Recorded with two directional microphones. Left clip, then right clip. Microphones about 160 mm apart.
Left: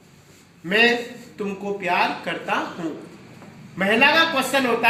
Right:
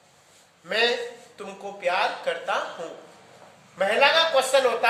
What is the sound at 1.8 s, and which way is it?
Speech, 25° right (ahead or behind).